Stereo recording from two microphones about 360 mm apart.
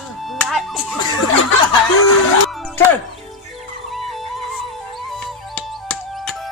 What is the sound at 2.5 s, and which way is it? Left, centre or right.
Music, centre.